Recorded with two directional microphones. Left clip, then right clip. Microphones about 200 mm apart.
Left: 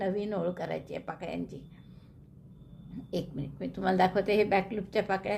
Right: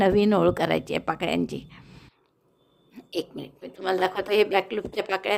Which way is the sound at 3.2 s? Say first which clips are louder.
Right 2 dB; 30° right (ahead or behind).